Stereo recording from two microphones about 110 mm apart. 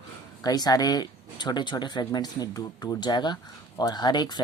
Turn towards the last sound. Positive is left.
turn(degrees=40)  # may be behind; listen again after turning